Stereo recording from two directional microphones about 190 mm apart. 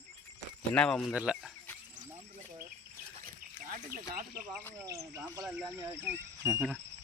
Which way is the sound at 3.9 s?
50° right (ahead or behind).